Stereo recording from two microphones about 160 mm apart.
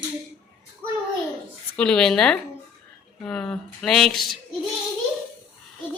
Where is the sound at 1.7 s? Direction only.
5° left (ahead or behind).